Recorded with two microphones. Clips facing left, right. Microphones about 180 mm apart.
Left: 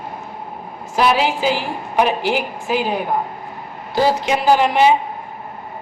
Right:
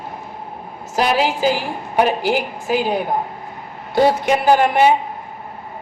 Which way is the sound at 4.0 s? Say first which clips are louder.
Right 2 dB; 60° right (ahead or behind).